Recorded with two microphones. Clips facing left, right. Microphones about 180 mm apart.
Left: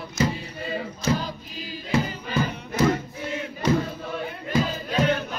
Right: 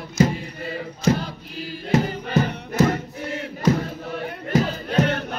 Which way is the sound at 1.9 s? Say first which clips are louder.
Right 4 dB; 55° right (ahead or behind).